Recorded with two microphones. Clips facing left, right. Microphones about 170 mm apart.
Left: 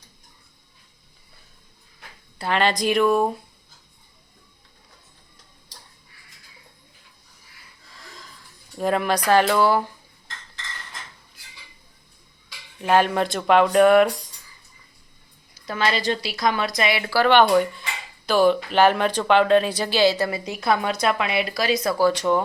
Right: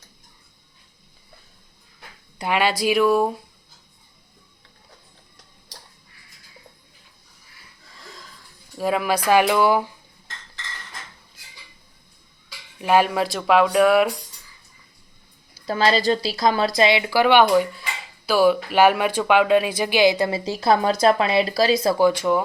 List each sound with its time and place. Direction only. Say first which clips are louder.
2.4 s speech: right 1 dB; 10° right (ahead or behind)
8.8 s speech: even; 5° right (ahead or behind)
12.8 s speech: right 1 dB; 10° right (ahead or behind)
15.5 s speech: right 4 dB; 35° right (ahead or behind)
22.0 s speech: even; 10° right (ahead or behind)